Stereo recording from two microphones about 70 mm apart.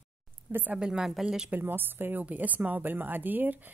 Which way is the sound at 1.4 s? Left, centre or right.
Right.